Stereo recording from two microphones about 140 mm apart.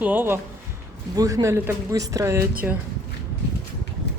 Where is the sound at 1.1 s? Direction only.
25° right (ahead or behind).